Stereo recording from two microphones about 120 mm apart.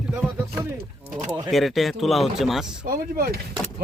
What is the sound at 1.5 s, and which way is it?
Speech, centre (ahead or behind).